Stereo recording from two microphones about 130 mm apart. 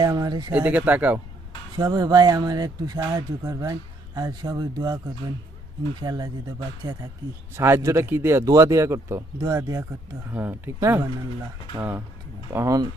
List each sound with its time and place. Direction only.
0.0 s speech: 30° right (ahead or behind)
0.5 s speech: 10° right (ahead or behind)
1.7 s speech: 30° right (ahead or behind)
6.0 s speech: 30° right (ahead or behind)
7.5 s speech: 20° right (ahead or behind)
12.5 s speech: 25° right (ahead or behind)